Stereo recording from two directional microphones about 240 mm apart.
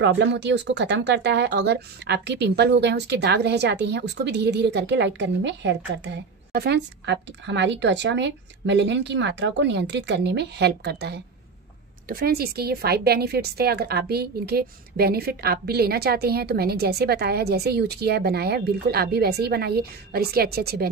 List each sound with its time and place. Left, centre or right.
0.0 s a woman's voice: right